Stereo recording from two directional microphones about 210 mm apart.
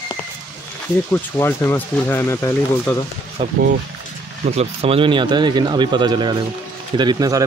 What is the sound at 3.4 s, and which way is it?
Speech, 25° right (ahead or behind).